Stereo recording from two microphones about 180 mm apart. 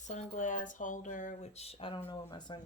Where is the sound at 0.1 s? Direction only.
45° left (ahead or behind).